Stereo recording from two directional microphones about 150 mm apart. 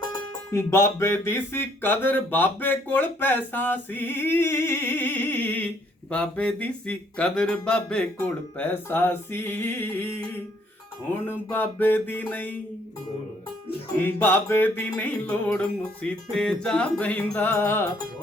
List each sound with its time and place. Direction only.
0.0 s music: 30° left (ahead or behind)
0.7 s speech: 15° left (ahead or behind)
14.0 s speech: 10° left (ahead or behind)